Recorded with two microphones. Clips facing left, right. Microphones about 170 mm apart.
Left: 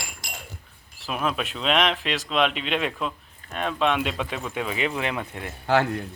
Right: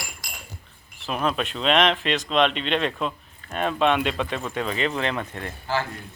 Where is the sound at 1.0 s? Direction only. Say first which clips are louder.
Right 2 dB; 5° left (ahead or behind).